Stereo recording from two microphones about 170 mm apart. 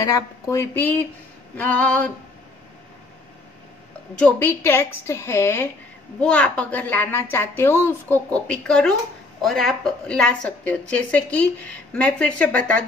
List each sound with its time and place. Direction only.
0.0 s a woman's voice: 20° left (ahead or behind)
4.1 s a woman's voice: 10° left (ahead or behind)